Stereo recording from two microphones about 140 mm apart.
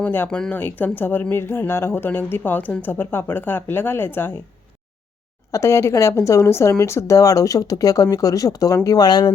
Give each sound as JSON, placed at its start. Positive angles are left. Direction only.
{"t": 0.0, "sound": "speech", "side_deg": 10}
{"t": 5.5, "sound": "speech", "side_deg": 20}